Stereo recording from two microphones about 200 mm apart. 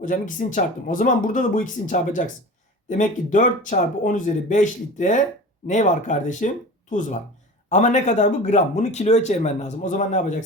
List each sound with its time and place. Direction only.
0.0 s speech: 40° left (ahead or behind)
7.7 s speech: 35° left (ahead or behind)